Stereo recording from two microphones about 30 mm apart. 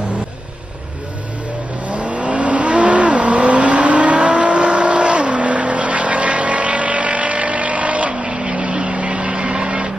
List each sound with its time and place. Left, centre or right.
1.9 s vehicle: right
8.1 s vehicle: right